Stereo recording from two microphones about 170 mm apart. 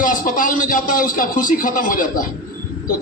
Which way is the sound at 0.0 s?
55° left (ahead or behind).